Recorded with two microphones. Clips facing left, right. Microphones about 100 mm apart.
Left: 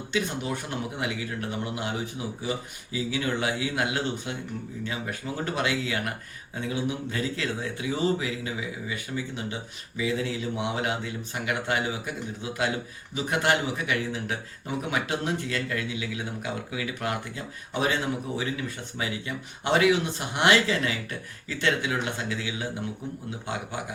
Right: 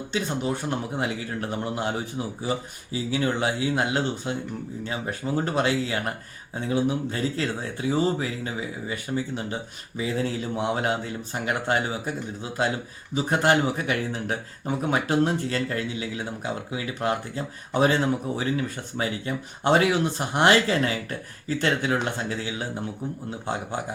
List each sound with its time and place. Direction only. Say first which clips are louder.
0.1 s speech: right 2 dB; 30° right (ahead or behind)